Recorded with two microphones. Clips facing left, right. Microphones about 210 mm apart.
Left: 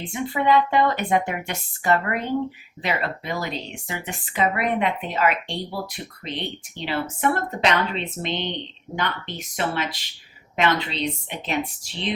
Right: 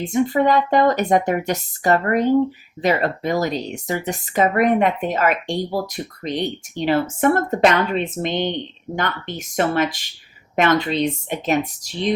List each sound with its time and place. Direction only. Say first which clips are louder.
0.0 s speech: right 7 dB; 40° right (ahead or behind)